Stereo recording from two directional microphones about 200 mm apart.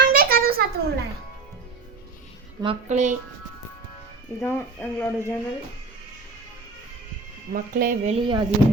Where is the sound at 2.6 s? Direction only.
30° right (ahead or behind).